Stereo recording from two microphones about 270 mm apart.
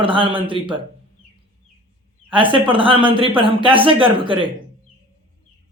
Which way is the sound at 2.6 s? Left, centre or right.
Centre.